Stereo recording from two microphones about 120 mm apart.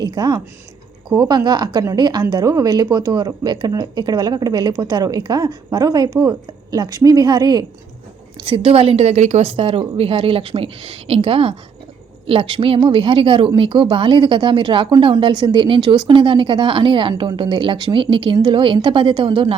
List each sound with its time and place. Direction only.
0.0 s speech: 35° right (ahead or behind)
8.4 s speech: 50° right (ahead or behind)